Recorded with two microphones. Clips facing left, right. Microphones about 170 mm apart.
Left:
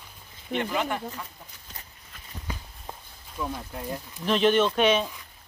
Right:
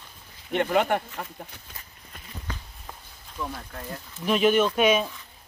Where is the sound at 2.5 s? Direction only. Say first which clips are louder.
Left 1 dB; 10° left (ahead or behind).